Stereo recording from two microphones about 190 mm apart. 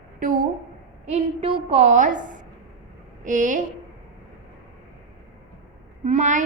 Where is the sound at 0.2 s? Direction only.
45° right (ahead or behind).